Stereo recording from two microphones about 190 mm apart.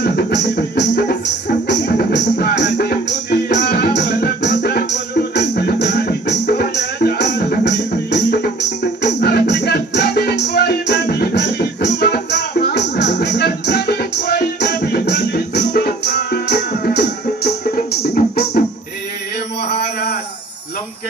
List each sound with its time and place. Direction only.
0.0 s music: 65° left (ahead or behind)